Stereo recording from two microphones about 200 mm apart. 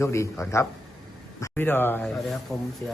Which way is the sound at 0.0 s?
15° left (ahead or behind).